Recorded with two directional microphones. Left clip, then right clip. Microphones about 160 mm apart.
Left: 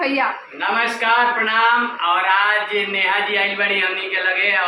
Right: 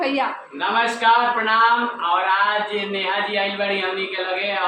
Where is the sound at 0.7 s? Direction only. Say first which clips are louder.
Left 1 dB; 25° right (ahead or behind).